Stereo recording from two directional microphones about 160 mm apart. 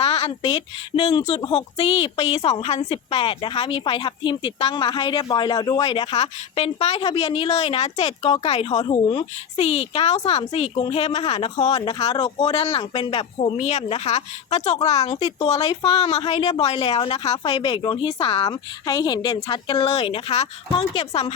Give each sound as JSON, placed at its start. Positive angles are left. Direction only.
{"t": 0.0, "sound": "speech", "side_deg": 30}